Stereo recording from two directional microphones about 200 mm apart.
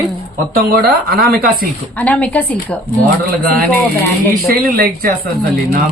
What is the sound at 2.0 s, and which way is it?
Speech, 5° left (ahead or behind).